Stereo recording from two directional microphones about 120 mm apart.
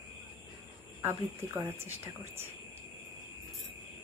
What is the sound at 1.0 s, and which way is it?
Speech, 20° right (ahead or behind).